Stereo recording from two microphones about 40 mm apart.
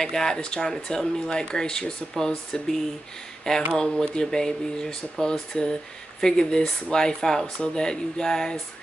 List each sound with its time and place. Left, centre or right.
0.0 s speech: centre
3.7 s speech: centre